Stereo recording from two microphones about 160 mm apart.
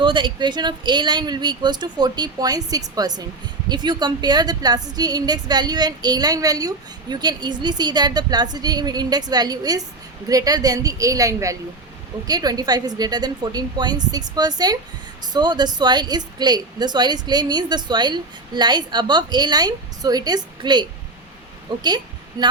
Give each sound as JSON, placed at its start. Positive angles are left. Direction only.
{"t": 0.0, "sound": "a woman's voice", "side_deg": -30}
{"t": 21.8, "sound": "a woman's voice", "side_deg": -25}